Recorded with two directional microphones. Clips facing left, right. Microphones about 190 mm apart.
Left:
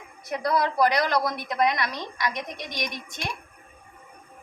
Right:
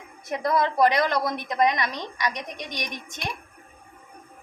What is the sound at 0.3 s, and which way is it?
A woman's voice, 25° right (ahead or behind).